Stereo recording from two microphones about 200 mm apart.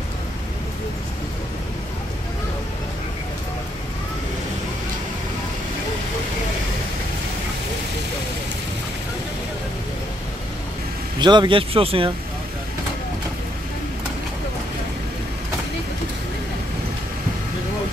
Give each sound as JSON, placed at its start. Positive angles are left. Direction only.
{"t": 11.1, "sound": "speech", "side_deg": -20}